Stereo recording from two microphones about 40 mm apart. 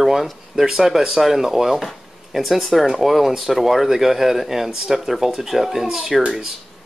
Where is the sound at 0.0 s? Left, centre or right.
Centre.